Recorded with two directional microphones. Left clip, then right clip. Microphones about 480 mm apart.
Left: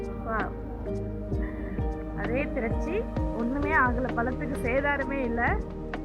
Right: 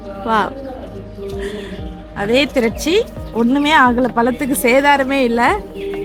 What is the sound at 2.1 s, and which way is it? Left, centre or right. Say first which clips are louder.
A woman's voice: right 16 dB; centre.